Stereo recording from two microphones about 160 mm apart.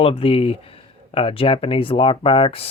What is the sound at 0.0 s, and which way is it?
Speech, 35° left (ahead or behind).